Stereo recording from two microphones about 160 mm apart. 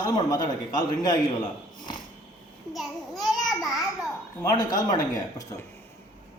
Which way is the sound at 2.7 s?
Centre (ahead or behind).